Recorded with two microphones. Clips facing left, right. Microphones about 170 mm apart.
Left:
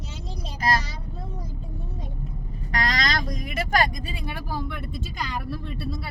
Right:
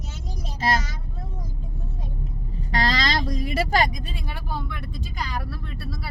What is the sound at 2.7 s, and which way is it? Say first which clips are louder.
Vehicle: right 2 dB; 30° right (ahead or behind).